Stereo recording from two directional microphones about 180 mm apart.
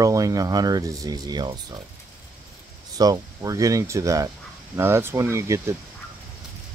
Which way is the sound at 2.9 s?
20° right (ahead or behind).